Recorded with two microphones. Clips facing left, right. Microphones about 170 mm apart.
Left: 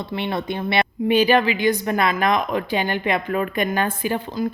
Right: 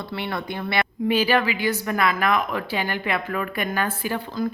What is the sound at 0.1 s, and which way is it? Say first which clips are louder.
A woman's voice: left 4 dB; 20° left (ahead or behind).